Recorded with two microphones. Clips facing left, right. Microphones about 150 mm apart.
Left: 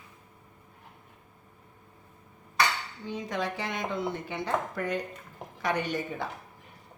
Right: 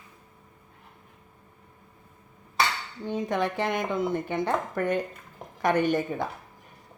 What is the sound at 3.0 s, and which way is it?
Speech, 55° right (ahead or behind).